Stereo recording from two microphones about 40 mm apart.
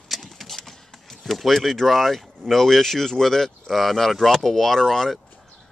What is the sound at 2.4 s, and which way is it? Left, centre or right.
Speech, centre.